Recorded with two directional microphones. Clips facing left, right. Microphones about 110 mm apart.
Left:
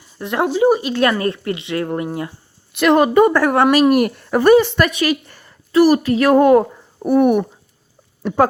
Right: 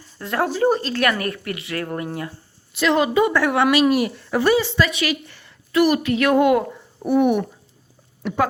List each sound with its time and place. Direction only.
0.2 s a woman's voice: 20° left (ahead or behind)
1.0 s speech: 30° left (ahead or behind)
2.7 s speech: 55° left (ahead or behind)